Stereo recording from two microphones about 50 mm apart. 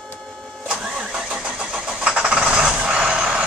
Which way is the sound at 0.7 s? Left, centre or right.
Centre.